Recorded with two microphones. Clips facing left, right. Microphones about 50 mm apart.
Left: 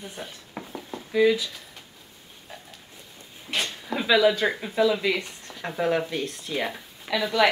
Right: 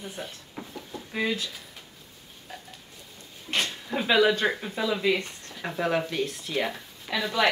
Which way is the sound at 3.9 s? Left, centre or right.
Left.